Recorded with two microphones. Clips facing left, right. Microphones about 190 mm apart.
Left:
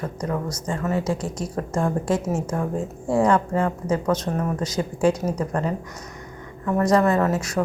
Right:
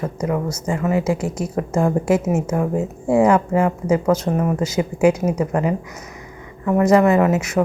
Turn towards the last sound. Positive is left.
turn(degrees=-30)  # may be behind; listen again after turning